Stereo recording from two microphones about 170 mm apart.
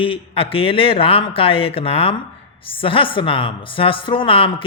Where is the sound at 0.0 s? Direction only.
30° left (ahead or behind).